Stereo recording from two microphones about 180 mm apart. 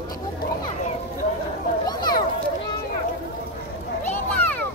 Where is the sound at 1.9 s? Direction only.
20° left (ahead or behind).